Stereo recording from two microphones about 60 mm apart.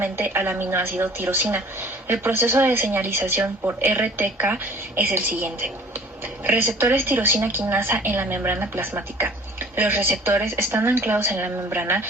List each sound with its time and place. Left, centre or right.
0.0 s a woman's voice: right
6.5 s a woman's voice: right